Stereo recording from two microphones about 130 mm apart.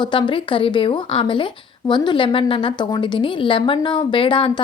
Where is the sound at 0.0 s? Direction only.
40° left (ahead or behind).